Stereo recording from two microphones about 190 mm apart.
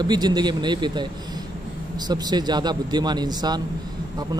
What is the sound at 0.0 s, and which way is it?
A man's voice, 20° right (ahead or behind).